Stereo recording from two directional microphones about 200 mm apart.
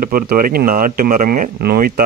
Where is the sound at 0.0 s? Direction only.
45° right (ahead or behind).